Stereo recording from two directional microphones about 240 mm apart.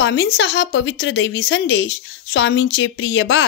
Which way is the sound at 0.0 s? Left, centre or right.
Left.